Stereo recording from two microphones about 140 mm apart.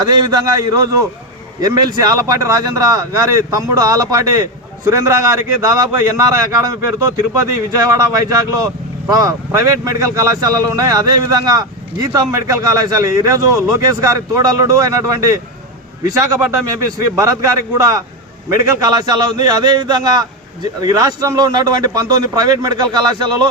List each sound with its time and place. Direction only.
0.0 s speech: 30° right (ahead or behind)
18.9 s speech: 30° right (ahead or behind)